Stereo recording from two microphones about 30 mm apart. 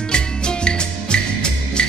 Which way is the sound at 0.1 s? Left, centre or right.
Left.